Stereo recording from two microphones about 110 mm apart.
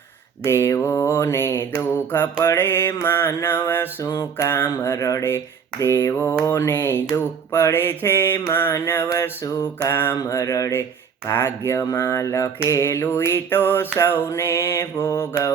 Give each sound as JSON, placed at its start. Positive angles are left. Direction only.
{"t": 0.4, "sound": "mantra", "side_deg": 25}